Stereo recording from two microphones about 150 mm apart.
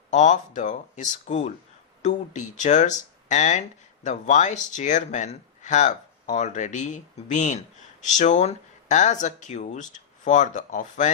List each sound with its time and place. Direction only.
0.1 s speech: 55° left (ahead or behind)